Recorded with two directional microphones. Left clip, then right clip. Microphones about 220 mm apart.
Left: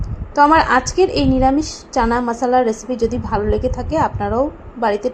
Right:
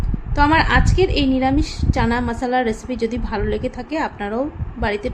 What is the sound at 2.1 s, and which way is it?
Speech, 10° right (ahead or behind).